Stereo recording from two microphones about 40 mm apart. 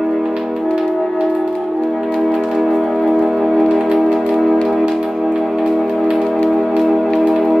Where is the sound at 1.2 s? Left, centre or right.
Centre.